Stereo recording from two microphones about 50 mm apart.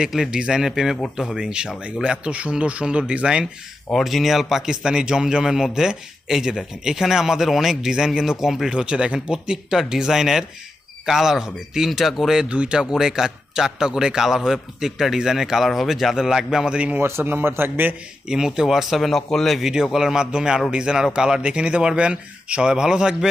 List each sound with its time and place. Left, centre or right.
0.0 s a man's voice: centre
3.9 s a man's voice: centre
8.7 s a man's voice: right; by 12.4 s centre
12.4 s a man's voice: right
17.0 s a man's voice: right
18.3 s speech: centre
19.6 s a man's voice: centre